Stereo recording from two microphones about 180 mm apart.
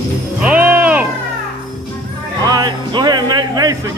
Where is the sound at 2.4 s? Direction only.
20° right (ahead or behind).